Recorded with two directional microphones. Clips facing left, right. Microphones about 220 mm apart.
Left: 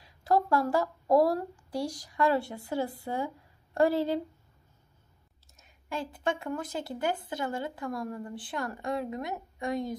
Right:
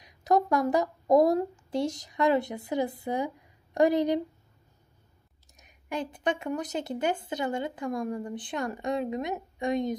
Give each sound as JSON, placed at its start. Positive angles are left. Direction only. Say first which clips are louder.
{"t": 0.0, "sound": "a woman's voice", "louder": "right 2 dB", "side_deg": -20}
{"t": 5.6, "sound": "speech", "louder": "right 3 dB", "side_deg": -20}